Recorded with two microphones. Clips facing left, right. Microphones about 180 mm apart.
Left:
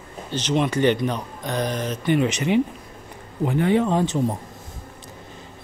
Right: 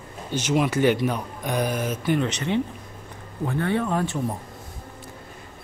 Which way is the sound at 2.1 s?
10° left (ahead or behind).